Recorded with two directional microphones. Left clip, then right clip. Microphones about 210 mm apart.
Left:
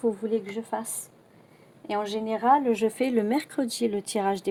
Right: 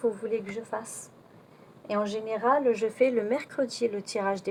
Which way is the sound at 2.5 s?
55° left (ahead or behind).